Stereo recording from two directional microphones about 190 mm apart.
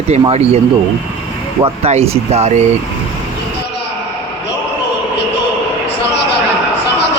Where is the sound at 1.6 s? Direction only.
30° right (ahead or behind).